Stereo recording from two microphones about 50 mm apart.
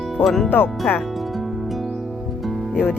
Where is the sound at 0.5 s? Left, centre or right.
Left.